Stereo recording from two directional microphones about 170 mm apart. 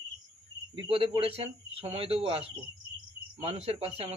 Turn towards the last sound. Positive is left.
turn(degrees=-35)  # may be behind; listen again after turning